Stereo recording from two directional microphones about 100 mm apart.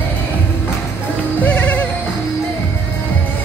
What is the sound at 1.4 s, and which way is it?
Music, 15° left (ahead or behind).